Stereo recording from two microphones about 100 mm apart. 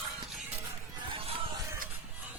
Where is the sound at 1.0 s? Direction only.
65° right (ahead or behind).